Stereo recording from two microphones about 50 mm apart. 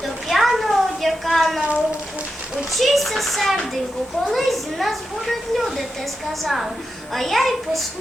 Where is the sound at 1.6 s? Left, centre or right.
Right.